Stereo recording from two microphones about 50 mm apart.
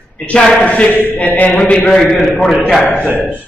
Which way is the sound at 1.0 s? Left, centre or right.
Left.